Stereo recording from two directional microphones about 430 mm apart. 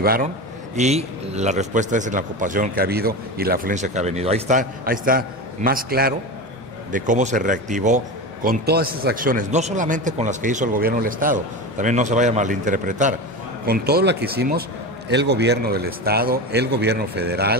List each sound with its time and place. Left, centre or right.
0.0 s a man's voice: centre